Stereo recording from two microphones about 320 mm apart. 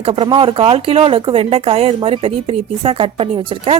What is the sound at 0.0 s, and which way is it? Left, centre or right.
Speech, centre.